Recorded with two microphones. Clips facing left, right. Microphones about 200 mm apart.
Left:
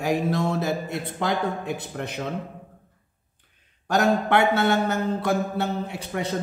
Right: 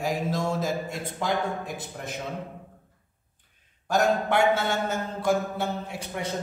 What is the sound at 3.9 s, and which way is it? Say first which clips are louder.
A man's voice: left 2 dB; 65° left (ahead or behind).